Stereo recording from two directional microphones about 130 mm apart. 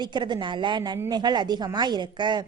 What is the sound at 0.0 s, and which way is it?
A woman's voice, 35° right (ahead or behind).